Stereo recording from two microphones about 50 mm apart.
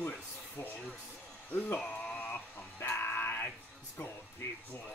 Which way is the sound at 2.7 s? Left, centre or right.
Left.